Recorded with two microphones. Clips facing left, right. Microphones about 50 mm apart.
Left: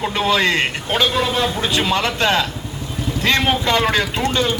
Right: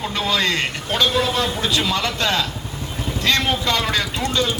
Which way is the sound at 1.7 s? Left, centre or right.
Left.